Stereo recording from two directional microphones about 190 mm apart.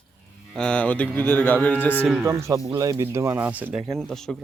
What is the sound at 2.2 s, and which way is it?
Speech, 15° right (ahead or behind).